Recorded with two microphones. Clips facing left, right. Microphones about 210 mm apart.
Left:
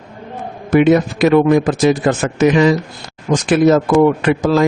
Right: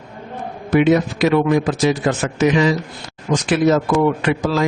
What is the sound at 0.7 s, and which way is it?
A man's voice, 50° left (ahead or behind).